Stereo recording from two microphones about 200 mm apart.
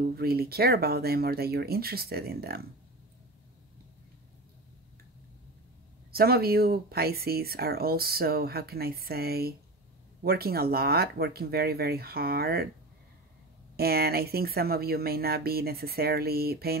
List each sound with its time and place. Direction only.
0.0 s speech: 50° right (ahead or behind)
6.1 s speech: 50° right (ahead or behind)
13.7 s speech: 50° right (ahead or behind)